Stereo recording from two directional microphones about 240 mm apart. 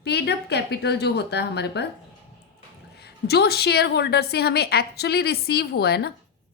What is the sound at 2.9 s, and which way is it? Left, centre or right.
A woman's voice, left.